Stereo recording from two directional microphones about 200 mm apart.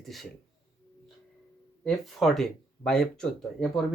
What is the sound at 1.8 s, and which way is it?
Speech, centre (ahead or behind).